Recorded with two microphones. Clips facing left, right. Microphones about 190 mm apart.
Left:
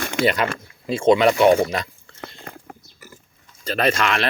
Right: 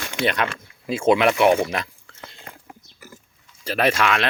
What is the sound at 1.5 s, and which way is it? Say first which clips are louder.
Speech: left 3 dB; 35° left (ahead or behind).